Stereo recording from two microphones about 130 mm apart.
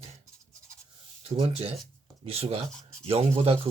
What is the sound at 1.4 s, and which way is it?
Speech, 50° right (ahead or behind).